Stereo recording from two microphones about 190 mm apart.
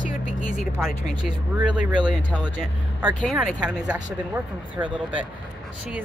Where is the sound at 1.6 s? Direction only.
25° right (ahead or behind).